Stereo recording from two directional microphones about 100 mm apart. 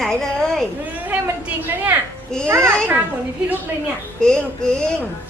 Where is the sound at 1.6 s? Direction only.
20° right (ahead or behind).